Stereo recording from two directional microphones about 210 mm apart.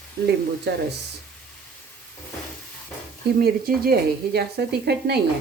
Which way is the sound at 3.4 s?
45° right (ahead or behind).